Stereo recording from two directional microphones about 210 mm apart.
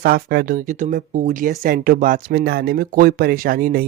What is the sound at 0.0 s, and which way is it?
Speech, 45° right (ahead or behind).